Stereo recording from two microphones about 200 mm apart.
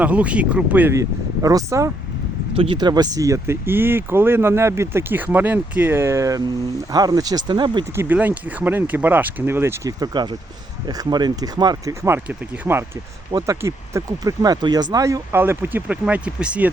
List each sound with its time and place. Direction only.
0.0 s speech: 5° right (ahead or behind); by 7.9 s 25° right (ahead or behind)
7.9 s speech: 10° right (ahead or behind)